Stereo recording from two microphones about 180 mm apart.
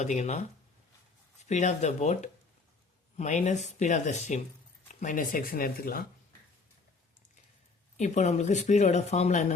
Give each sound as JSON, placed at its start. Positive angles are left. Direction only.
{"t": 0.0, "sound": "speech", "side_deg": 40}
{"t": 1.5, "sound": "speech", "side_deg": 40}
{"t": 7.9, "sound": "speech", "side_deg": 40}